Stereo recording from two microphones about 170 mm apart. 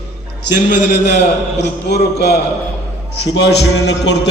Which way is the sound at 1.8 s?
70° left (ahead or behind).